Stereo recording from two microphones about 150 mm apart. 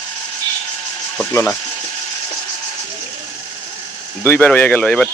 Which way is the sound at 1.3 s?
20° left (ahead or behind).